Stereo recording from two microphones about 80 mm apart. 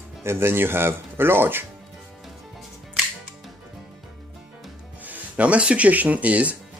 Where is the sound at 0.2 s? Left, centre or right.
Right.